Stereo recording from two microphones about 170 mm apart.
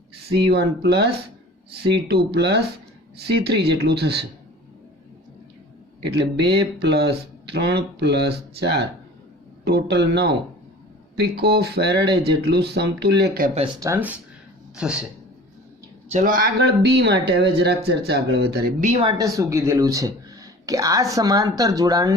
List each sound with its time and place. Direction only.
0.5 s speech: 75° right (ahead or behind)
6.7 s speech: 75° right (ahead or behind)
13.7 s speech: 15° right (ahead or behind)
16.0 s speech: 45° right (ahead or behind); by 18.7 s 75° right (ahead or behind)
18.8 s speech: 45° right (ahead or behind)
19.0 s speech: 20° right (ahead or behind)